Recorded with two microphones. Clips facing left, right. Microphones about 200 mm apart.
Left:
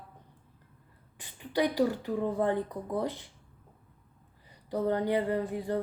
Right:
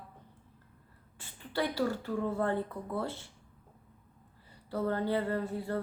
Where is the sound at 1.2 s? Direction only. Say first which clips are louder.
Left 5 dB; 15° left (ahead or behind).